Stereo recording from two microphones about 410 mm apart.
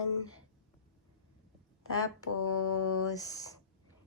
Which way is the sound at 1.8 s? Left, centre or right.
Left.